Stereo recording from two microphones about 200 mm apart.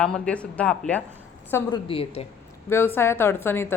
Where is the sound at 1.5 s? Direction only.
25° left (ahead or behind).